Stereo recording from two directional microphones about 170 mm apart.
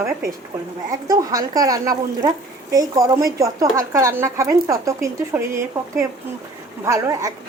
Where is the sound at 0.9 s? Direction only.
20° right (ahead or behind).